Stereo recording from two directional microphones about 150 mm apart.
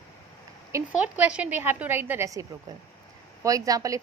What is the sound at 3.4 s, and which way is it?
Speech, 25° right (ahead or behind).